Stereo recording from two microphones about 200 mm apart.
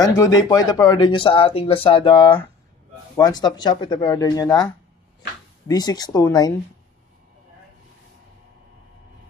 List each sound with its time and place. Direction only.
0.0 s speech: 15° left (ahead or behind)
5.7 s speech: 20° left (ahead or behind)